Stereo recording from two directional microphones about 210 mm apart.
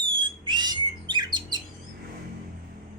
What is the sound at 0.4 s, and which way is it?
Bird, 20° right (ahead or behind).